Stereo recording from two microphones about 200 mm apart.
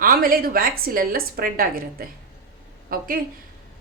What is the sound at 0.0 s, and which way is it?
A woman's voice, 45° right (ahead or behind).